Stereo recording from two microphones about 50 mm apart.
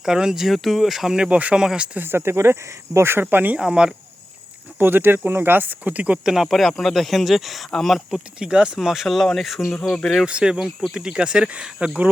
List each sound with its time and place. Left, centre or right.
0.0 s speech: centre
1.1 s speech: centre
2.0 s speech: right
3.2 s speech: right
3.6 s speech: centre
4.8 s speech: right
6.2 s speech: centre
8.4 s speech: centre
9.9 s speech: centre
10.2 s speech: centre